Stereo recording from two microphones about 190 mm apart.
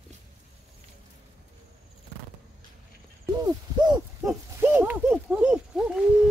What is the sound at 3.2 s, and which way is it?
Mechanisms, 20° right (ahead or behind).